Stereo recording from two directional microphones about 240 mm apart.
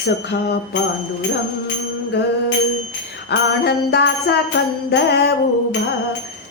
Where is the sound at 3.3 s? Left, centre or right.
Left.